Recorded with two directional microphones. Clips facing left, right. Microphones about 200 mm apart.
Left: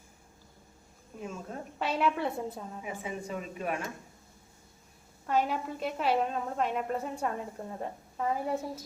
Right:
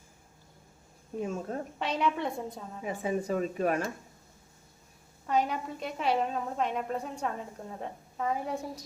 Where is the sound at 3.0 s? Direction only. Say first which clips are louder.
Right 10 dB; 40° right (ahead or behind).